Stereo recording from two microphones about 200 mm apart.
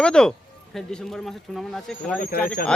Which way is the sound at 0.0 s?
5° left (ahead or behind).